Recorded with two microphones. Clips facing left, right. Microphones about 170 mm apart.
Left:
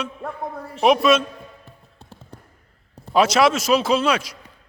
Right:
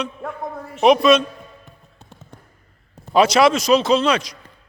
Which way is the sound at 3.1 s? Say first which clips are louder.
Right 2 dB; centre (ahead or behind).